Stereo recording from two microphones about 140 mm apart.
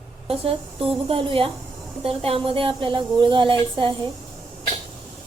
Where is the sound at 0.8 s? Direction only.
40° right (ahead or behind).